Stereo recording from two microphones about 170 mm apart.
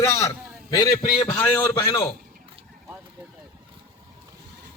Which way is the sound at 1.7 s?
20° left (ahead or behind).